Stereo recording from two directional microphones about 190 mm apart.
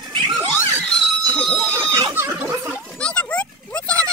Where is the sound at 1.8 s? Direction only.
20° right (ahead or behind).